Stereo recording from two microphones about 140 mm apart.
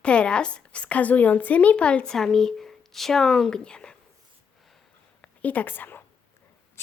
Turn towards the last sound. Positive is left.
turn(degrees=15)  # may be behind; listen again after turning